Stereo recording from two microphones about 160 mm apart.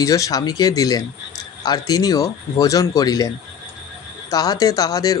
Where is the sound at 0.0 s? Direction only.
20° left (ahead or behind).